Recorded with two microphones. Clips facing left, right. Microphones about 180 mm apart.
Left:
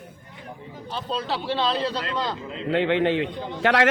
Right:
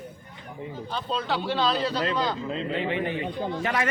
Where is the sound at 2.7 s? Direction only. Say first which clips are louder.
Left 9 dB; 85° left.